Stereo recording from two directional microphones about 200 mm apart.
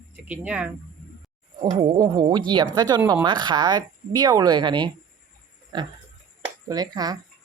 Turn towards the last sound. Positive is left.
turn(degrees=-20)  # may be behind; listen again after turning